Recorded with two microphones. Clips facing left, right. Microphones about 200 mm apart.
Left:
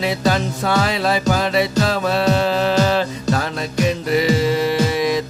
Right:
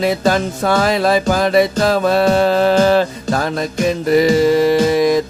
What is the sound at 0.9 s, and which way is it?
Music, 45° right (ahead or behind).